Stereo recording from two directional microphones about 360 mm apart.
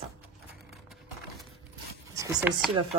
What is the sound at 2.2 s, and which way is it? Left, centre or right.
Speech, centre.